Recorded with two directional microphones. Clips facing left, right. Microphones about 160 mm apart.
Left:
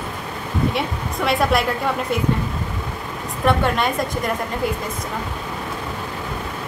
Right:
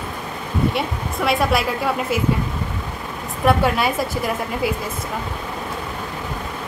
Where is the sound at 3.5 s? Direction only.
5° right (ahead or behind).